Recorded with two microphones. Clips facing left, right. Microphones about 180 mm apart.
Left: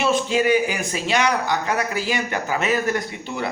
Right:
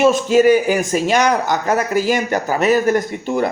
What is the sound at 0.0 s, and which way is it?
A man's voice, 45° right (ahead or behind).